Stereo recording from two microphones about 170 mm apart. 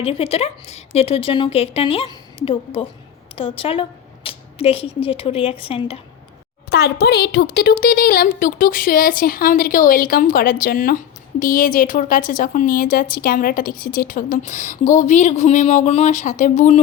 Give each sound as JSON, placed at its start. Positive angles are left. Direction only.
{"t": 0.0, "sound": "a woman's voice", "side_deg": 35}
{"t": 6.7, "sound": "a woman's voice", "side_deg": 75}